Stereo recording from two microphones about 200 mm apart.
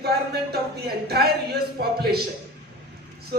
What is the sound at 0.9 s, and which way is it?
Speech, 50° right (ahead or behind).